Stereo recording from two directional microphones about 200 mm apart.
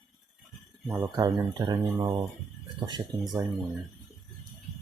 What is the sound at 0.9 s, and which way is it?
Speech, 20° right (ahead or behind).